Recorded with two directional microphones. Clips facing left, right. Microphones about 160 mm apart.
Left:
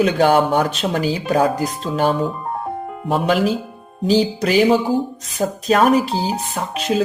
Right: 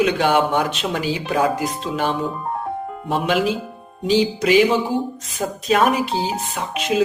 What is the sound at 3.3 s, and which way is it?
Speech, 40° left (ahead or behind).